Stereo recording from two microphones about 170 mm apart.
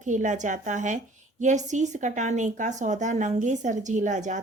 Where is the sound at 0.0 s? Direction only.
45° right (ahead or behind).